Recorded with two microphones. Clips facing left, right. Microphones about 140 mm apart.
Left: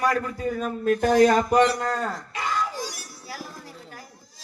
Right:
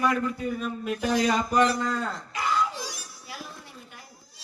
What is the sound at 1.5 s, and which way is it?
Speech, 35° left (ahead or behind).